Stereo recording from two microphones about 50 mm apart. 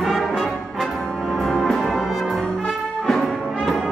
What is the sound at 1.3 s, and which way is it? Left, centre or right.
Music, centre.